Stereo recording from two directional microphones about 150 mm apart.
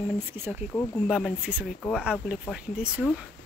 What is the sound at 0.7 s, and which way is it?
Speech, 20° left (ahead or behind).